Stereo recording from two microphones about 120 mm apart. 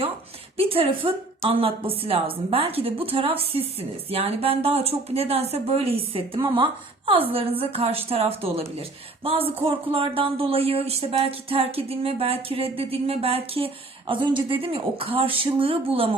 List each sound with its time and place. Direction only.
0.5 s speech: 50° right (ahead or behind)